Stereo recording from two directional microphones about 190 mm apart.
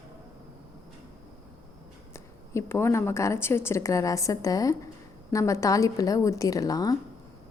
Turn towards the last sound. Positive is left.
turn(degrees=20)  # may be behind; listen again after turning